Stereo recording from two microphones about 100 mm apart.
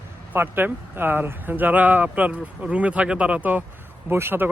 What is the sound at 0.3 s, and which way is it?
Speech, 20° right (ahead or behind).